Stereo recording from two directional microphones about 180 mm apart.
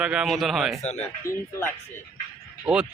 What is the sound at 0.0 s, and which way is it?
Speech, 5° right (ahead or behind).